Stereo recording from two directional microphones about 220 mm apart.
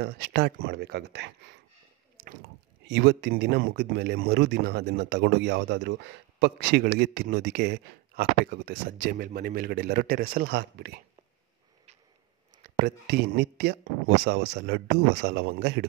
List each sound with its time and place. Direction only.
0.0 s speech: 45° right (ahead or behind)
2.9 s speech: 50° right (ahead or behind)
12.6 s speech: 45° right (ahead or behind)